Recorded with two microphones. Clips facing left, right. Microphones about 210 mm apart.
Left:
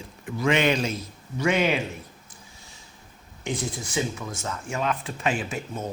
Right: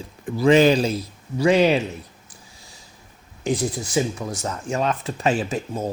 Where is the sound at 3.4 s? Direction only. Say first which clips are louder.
Right 7 dB; 35° right (ahead or behind).